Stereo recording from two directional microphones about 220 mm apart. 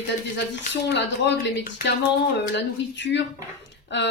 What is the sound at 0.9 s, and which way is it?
Speech, 55° left (ahead or behind).